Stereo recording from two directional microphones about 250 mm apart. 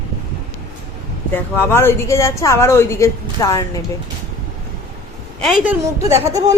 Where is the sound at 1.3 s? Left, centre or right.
Centre.